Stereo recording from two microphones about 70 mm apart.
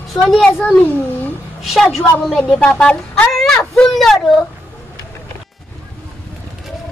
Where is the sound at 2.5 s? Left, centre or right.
Centre.